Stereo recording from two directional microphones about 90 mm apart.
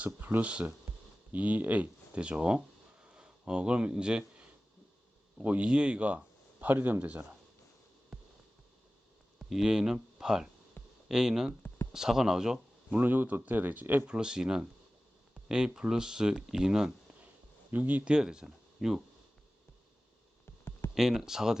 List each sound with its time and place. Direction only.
0.0 s speech: 20° right (ahead or behind)
8.1 s music: centre (ahead or behind)
9.5 s speech: 5° right (ahead or behind)
10.8 s a sound: 20° left (ahead or behind)
11.1 s speech: 5° right (ahead or behind)
13.0 s speech: 20° right (ahead or behind)
14.2 s speech: 10° right (ahead or behind)
17.7 s speech: 20° right (ahead or behind)
20.4 s a sound: 25° left (ahead or behind)
20.9 s speech: 5° right (ahead or behind)